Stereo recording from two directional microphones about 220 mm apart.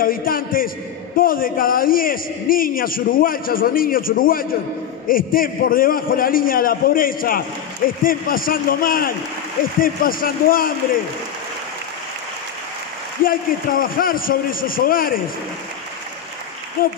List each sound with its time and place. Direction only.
0.0 s a man's voice: 40° left (ahead or behind)
13.2 s a man's voice: 40° left (ahead or behind)
16.8 s a man's voice: 40° left (ahead or behind)